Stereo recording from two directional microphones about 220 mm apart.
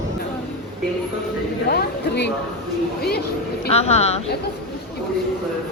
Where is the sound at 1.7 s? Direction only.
45° left (ahead or behind).